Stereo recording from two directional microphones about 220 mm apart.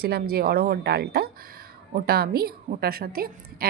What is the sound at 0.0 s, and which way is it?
Speech, 45° right (ahead or behind).